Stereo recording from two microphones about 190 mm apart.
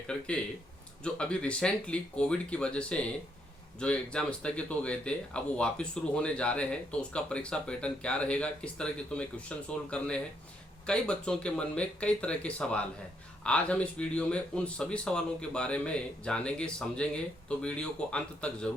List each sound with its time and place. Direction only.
1.0 s speech: 5° left (ahead or behind)